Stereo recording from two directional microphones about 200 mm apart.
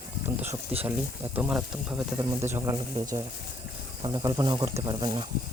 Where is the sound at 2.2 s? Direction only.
15° right (ahead or behind).